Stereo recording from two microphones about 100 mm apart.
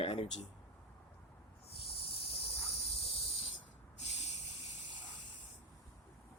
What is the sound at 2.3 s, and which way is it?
Hiss, 75° left (ahead or behind).